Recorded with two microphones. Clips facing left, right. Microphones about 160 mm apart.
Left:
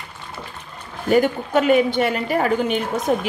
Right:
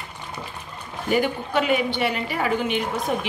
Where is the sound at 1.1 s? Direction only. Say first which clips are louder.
Left 5 dB; 45° left (ahead or behind).